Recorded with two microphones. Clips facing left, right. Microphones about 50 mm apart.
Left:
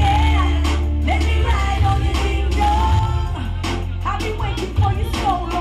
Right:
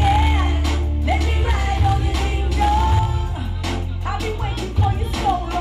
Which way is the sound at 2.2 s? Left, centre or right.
Left.